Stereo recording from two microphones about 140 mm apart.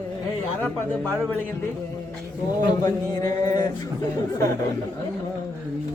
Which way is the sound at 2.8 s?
25° left (ahead or behind).